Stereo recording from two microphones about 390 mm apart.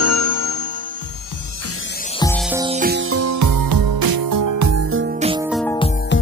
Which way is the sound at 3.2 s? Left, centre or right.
Right.